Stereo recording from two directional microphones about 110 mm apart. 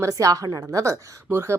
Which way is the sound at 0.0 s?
30° right (ahead or behind).